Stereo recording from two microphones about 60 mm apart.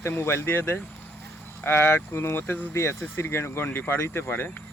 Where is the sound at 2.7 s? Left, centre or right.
Left.